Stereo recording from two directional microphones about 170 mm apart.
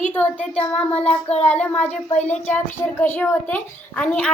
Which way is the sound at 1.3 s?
40° left (ahead or behind).